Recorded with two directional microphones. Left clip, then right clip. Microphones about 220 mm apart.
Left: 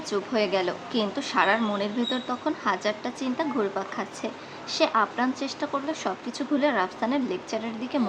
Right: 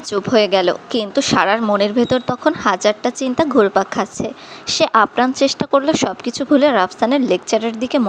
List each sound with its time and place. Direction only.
0.1 s a woman's voice: 35° right (ahead or behind)